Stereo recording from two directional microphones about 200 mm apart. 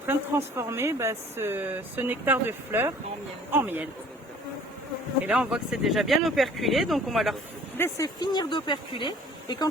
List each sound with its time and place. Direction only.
0.1 s speech: 10° right (ahead or behind)
5.2 s speech: 5° right (ahead or behind)
7.8 s speech: 15° left (ahead or behind)